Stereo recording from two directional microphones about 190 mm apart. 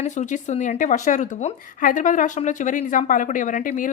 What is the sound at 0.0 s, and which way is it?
Speech, 40° left (ahead or behind).